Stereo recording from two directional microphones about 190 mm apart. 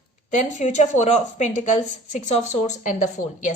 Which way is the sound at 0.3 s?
40° left (ahead or behind).